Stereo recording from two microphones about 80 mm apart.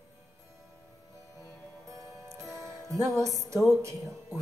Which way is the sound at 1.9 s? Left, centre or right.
Right.